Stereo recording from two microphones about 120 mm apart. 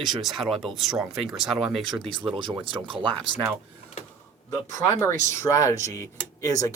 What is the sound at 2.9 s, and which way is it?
Speech, 45° right (ahead or behind).